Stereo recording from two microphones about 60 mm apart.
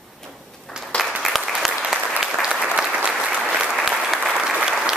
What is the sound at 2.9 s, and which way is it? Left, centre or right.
Applause, right.